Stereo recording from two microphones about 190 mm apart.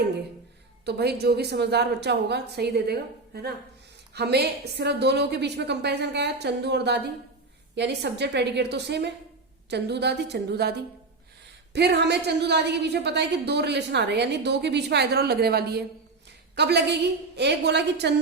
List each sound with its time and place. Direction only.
0.9 s a woman's voice: 60° right (ahead or behind)